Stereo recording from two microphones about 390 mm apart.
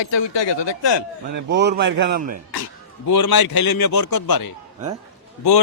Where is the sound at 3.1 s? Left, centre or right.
Left.